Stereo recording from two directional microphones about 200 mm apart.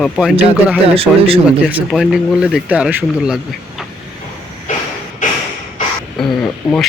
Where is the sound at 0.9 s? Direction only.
30° right (ahead or behind).